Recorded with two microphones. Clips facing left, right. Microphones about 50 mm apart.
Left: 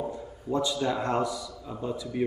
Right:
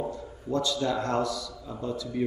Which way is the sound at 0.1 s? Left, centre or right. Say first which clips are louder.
Even; centre.